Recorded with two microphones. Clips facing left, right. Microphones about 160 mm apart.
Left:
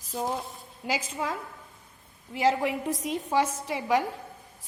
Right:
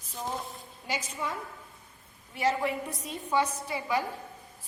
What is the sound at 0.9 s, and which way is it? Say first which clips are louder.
Speech: left 4 dB; 90° left.